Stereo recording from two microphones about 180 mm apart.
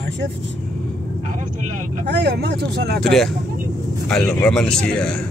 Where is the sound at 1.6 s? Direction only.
55° right (ahead or behind).